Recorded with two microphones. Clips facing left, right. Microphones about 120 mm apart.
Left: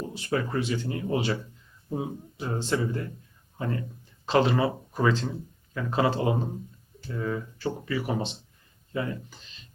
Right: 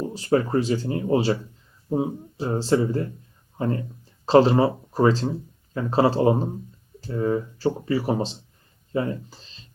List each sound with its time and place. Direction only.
0.0 s speech: 35° right (ahead or behind)